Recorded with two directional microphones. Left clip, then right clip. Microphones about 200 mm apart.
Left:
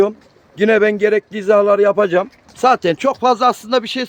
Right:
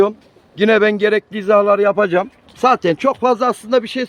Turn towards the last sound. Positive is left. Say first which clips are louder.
# right 1 dB
turn(degrees=0)  # may be behind; listen again after turning